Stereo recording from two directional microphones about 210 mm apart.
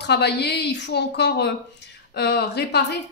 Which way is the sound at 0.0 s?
50° left (ahead or behind).